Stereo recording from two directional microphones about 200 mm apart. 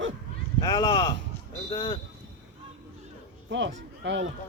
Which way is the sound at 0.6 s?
20° left (ahead or behind).